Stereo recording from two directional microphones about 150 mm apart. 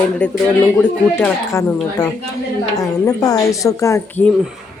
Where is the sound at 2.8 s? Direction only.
25° left (ahead or behind).